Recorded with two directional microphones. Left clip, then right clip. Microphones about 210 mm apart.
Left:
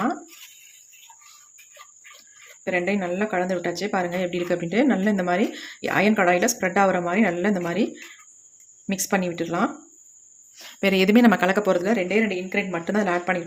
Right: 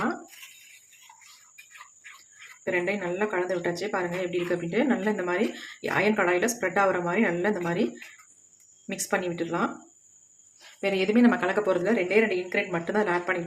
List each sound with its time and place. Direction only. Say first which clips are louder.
2.6 s a woman's voice: left 3 dB; 35° left (ahead or behind)
8.9 s a woman's voice: left 4 dB; 35° left (ahead or behind)
10.6 s a woman's voice: left 6 dB; 50° left (ahead or behind)